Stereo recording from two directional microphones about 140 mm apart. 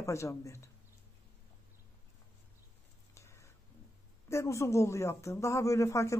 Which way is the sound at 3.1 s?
20° left (ahead or behind).